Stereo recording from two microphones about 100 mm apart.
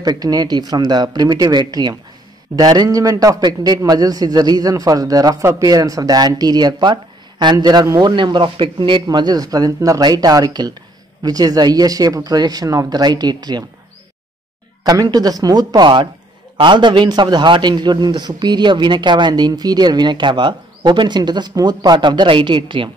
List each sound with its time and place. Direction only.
0.0 s a man's voice: 40° right (ahead or behind)
14.8 s a man's voice: 40° right (ahead or behind)